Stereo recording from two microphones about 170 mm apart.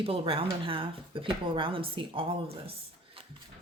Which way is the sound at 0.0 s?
35° right (ahead or behind).